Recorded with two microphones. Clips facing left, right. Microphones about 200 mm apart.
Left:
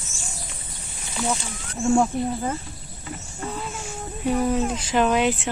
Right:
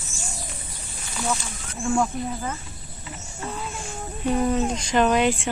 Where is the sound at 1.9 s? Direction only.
30° left (ahead or behind).